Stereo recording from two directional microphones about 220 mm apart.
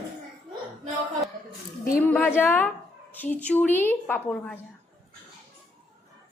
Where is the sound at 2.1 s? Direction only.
10° left (ahead or behind).